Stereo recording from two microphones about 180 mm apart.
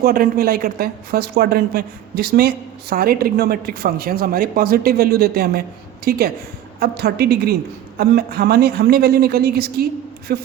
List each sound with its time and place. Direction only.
0.0 s a woman's voice: 55° right (ahead or behind)